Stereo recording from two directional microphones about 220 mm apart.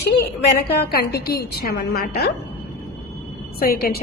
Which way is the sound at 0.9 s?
45° left (ahead or behind).